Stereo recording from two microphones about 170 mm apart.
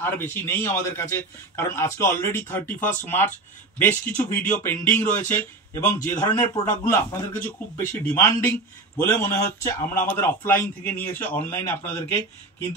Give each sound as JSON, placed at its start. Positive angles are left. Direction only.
{"t": 0.0, "sound": "a man's voice", "side_deg": 10}
{"t": 6.5, "sound": "a man's voice", "side_deg": 20}